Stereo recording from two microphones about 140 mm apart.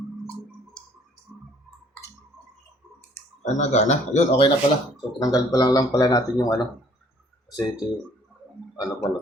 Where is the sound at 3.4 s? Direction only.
55° left (ahead or behind).